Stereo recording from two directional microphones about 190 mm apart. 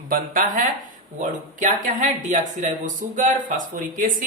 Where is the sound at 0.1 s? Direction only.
45° right (ahead or behind).